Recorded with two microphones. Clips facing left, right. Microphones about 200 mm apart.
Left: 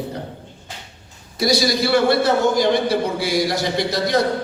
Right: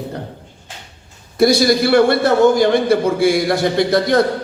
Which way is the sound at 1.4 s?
55° right (ahead or behind).